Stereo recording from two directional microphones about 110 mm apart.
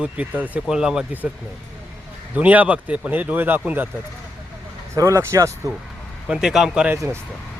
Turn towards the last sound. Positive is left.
turn(degrees=-10)  # may be behind; listen again after turning